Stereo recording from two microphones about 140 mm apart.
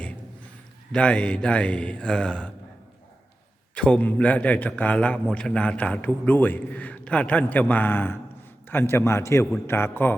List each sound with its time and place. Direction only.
0.9 s a man's voice: 10° left (ahead or behind)
3.8 s a man's voice: 10° left (ahead or behind)